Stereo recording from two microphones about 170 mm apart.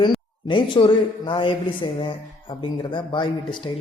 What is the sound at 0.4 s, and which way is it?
A man's voice, 30° left (ahead or behind).